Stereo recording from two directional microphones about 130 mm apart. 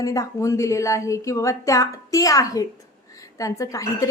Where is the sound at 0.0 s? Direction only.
25° left (ahead or behind).